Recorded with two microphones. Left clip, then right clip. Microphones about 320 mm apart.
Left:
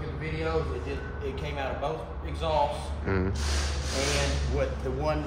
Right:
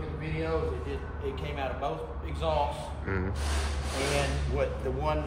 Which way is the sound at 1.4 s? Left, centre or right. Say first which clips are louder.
Left 2 dB; centre.